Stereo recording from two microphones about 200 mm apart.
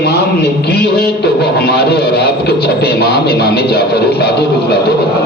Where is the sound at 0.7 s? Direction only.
55° left (ahead or behind).